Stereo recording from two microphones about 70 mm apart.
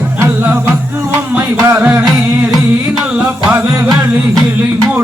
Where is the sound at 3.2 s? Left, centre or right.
Right.